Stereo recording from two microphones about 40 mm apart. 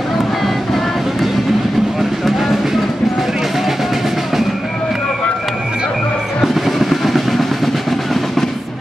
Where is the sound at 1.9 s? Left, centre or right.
Centre.